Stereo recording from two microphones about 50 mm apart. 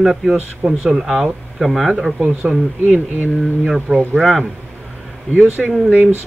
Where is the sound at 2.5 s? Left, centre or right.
Centre.